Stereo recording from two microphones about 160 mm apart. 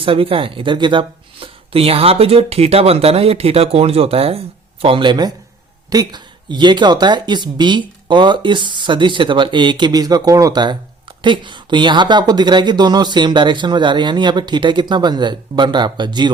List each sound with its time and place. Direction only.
0.0 s speech: 35° right (ahead or behind)